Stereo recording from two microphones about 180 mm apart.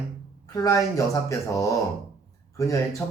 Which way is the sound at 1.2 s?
15° left (ahead or behind).